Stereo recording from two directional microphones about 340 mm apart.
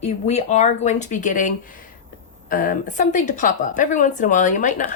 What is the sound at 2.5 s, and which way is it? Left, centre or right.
A woman's voice, left.